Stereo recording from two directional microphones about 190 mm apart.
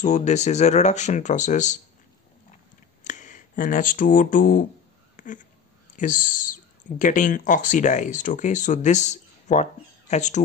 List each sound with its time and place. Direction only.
0.0 s speech: 40° left (ahead or behind)
3.0 s speech: 40° left (ahead or behind)
5.1 s a sound: 40° left (ahead or behind)
5.9 s speech: 45° left (ahead or behind)